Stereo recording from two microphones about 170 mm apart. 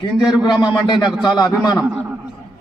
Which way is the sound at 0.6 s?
25° left (ahead or behind).